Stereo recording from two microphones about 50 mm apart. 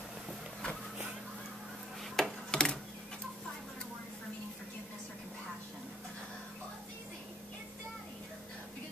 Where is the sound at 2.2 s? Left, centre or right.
Centre.